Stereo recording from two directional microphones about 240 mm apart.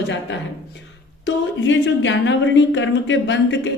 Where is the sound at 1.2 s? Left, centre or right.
Left.